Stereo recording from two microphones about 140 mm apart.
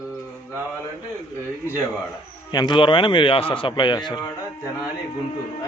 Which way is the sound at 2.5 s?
35° left (ahead or behind).